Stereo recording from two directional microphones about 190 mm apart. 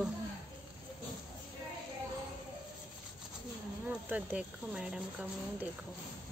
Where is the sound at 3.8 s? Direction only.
10° right (ahead or behind).